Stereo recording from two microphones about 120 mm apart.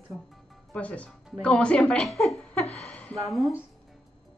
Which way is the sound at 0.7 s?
10° left (ahead or behind).